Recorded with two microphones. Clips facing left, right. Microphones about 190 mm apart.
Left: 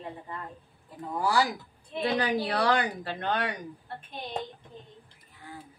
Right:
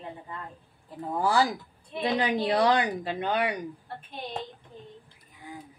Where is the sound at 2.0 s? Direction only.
20° right (ahead or behind).